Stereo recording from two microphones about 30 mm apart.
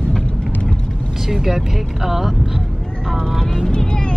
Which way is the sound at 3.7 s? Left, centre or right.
Left.